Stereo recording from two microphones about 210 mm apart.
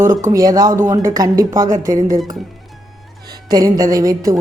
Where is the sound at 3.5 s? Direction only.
15° right (ahead or behind).